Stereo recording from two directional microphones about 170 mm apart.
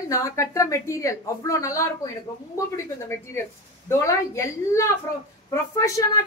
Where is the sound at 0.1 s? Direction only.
20° left (ahead or behind).